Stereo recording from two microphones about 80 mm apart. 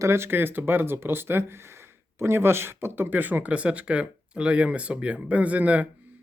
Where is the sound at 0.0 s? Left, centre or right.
Right.